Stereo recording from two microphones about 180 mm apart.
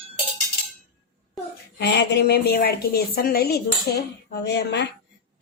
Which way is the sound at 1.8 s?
70° left (ahead or behind).